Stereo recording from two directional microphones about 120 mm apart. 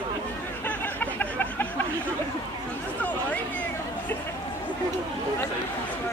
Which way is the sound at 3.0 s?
10° left (ahead or behind).